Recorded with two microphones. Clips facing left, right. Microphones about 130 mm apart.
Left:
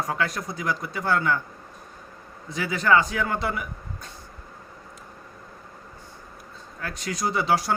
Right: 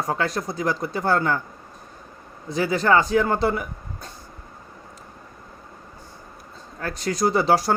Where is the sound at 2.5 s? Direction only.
35° right (ahead or behind).